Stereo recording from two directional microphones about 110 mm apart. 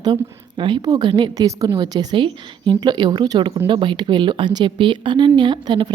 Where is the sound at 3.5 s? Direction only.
55° right (ahead or behind).